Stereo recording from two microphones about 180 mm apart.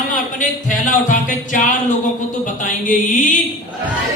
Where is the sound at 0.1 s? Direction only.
45° left (ahead or behind).